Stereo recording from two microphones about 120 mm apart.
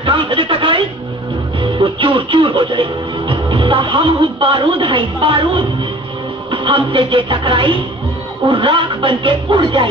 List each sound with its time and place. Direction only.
0.0 s a woman's voice: 45° right (ahead or behind)